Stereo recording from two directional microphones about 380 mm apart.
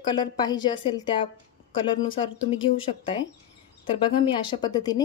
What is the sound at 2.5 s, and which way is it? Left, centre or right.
Speech, centre.